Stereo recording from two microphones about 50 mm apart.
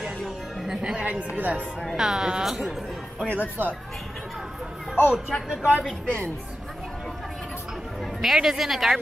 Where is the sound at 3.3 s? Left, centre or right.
Right.